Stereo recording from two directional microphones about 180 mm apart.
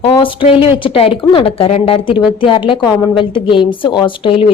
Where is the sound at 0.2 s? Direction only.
30° left (ahead or behind).